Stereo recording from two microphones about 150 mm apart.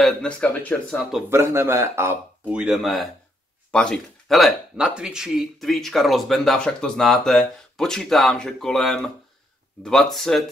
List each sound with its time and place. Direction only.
0.0 s speech: 5° left (ahead or behind)
1.3 s speech: 15° right (ahead or behind); by 10.4 s 5° left (ahead or behind)